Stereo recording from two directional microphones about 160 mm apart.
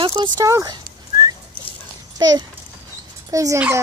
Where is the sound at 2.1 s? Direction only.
25° right (ahead or behind).